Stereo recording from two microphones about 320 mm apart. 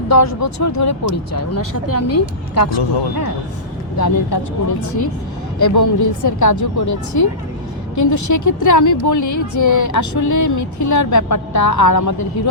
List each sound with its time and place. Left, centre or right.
0.1 s speech: left
3.9 s speech: left
5.5 s speech: left